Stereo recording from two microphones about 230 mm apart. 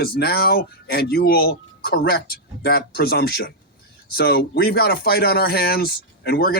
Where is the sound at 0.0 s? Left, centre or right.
Left.